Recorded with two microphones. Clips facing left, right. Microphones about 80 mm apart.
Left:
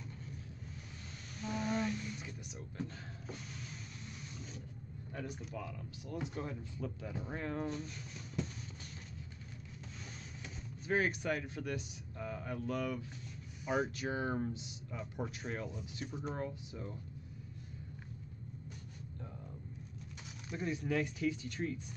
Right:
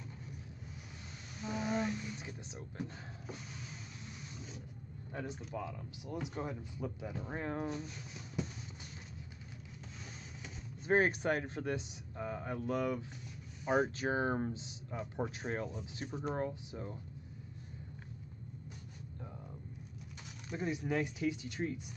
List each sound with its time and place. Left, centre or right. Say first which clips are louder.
1.4 s a sound: right 1 dB; centre
2.2 s music: right 1 dB; right
3.3 s a sound: even; centre
5.1 s speech: right 2 dB; right
7.6 s speech: even; centre
10.9 s speech: right 4 dB; right
13.7 s speech: right 3 dB; right
20.6 s speech: even; centre